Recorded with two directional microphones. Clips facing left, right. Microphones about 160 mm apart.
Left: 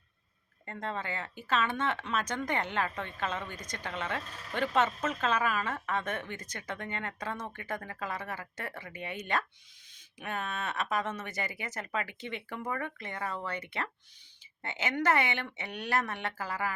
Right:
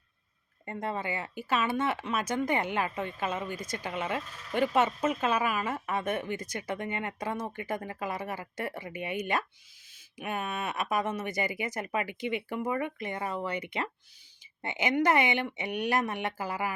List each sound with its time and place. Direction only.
0.6 s speech: 10° right (ahead or behind)